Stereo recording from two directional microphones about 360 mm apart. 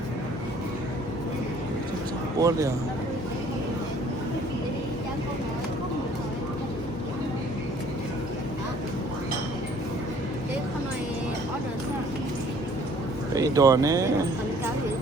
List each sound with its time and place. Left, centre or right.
2.4 s speech: centre
13.3 s speech: centre